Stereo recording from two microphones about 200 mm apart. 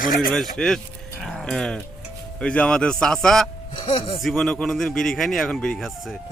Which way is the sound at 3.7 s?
25° left (ahead or behind).